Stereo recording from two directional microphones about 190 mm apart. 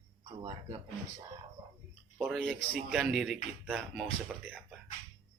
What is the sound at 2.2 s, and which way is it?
Speech, centre (ahead or behind).